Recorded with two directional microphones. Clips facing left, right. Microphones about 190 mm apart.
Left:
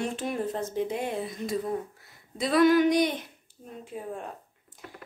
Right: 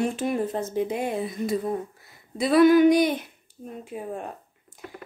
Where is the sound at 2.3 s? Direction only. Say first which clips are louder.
Right 4 dB; 5° right (ahead or behind).